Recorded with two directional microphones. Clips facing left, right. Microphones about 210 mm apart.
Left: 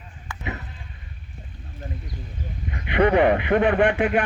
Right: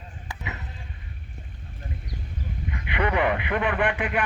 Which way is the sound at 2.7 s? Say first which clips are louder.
Left 7 dB; 35° left (ahead or behind).